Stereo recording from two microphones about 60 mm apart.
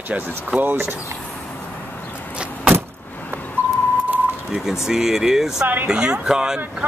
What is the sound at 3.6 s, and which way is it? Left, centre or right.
Vehicle, left.